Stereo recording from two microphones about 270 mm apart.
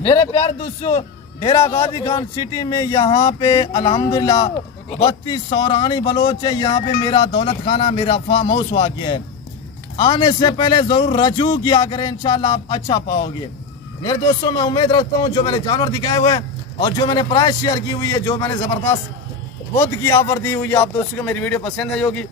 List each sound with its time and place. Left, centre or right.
0.0 s a man's voice: centre
4.9 s a man's voice: left; by 22.1 s centre